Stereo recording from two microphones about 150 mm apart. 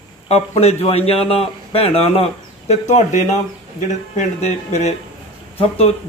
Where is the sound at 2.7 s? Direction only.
50° left (ahead or behind).